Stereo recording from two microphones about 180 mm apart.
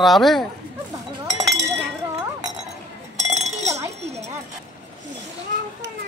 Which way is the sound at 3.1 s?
40° right (ahead or behind).